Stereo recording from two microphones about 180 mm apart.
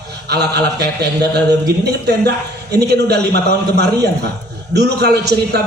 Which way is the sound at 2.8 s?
65° right (ahead or behind).